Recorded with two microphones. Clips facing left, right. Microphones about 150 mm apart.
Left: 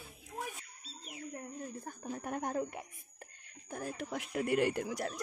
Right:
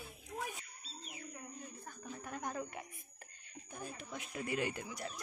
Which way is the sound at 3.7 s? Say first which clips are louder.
Left 7 dB; 85° left.